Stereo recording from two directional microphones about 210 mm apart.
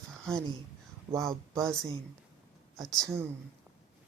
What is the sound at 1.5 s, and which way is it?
Speech, 15° right (ahead or behind).